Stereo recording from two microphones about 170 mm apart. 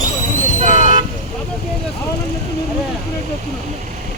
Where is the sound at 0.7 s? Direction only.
45° right (ahead or behind).